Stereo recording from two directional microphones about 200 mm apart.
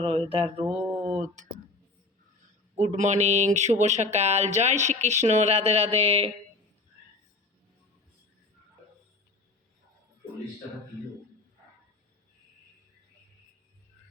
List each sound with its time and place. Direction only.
0.0 s mantra: 30° right (ahead or behind)
0.7 s a sound: 5° right (ahead or behind)
1.0 s speech: 35° right (ahead or behind)
2.7 s speech: 35° right (ahead or behind)